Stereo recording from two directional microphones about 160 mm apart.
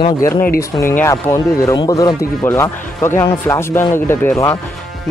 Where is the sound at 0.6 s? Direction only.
15° left (ahead or behind).